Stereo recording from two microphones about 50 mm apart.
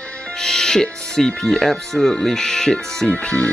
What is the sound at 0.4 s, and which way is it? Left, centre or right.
Speech, centre.